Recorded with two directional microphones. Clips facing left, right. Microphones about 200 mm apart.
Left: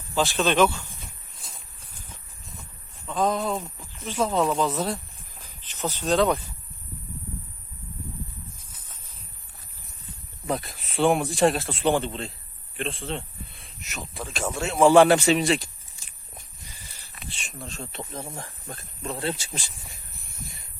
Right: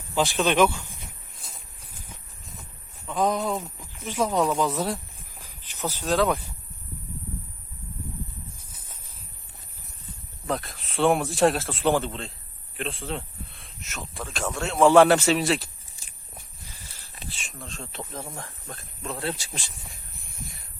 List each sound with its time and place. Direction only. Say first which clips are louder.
0.1 s speech: even; 15° right (ahead or behind)
1.5 s a sound: even; 5° right (ahead or behind)
3.1 s speech: even; 15° right (ahead or behind)
5.4 s cricket: left 1 dB; 15° right (ahead or behind)
5.9 s speech: left 1 dB; 5° right (ahead or behind)
10.4 s speech: left 1 dB; 5° left (ahead or behind)
17.2 s speech: left 2 dB; centre (ahead or behind)